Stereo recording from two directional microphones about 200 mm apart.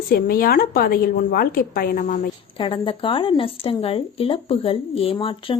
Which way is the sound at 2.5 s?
25° left (ahead or behind).